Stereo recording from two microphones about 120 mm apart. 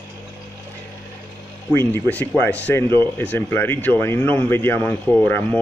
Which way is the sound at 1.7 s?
20° left (ahead or behind).